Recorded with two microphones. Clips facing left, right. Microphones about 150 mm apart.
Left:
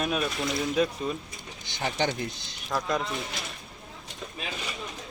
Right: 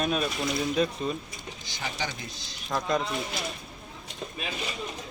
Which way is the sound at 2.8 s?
Centre (ahead or behind).